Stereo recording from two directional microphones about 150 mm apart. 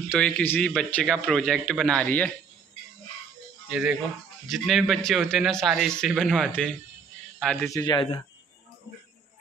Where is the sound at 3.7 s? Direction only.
5° right (ahead or behind).